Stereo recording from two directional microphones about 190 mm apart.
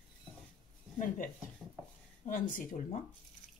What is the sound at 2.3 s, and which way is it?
Speech, 45° left (ahead or behind).